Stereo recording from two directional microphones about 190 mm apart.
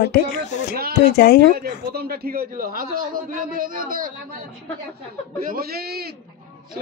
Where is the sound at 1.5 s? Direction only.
55° right (ahead or behind).